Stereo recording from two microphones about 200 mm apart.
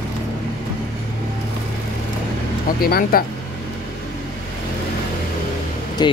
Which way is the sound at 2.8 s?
50° left (ahead or behind).